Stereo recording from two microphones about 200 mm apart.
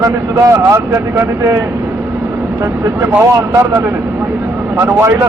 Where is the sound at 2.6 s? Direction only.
15° right (ahead or behind).